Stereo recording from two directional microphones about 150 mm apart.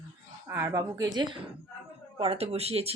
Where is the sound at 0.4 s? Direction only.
15° right (ahead or behind).